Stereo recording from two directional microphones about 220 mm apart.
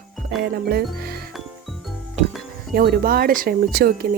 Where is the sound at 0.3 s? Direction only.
45° right (ahead or behind).